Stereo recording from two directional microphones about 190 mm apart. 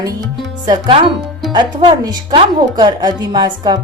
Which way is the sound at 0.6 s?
25° right (ahead or behind).